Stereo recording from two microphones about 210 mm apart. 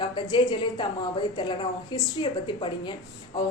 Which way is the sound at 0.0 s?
20° left (ahead or behind).